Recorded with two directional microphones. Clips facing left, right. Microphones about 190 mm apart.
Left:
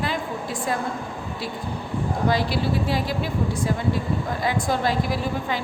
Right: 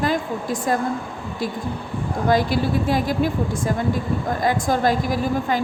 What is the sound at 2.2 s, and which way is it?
A woman's voice, 50° right (ahead or behind).